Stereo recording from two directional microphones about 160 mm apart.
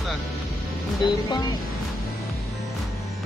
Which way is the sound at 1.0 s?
25° left (ahead or behind).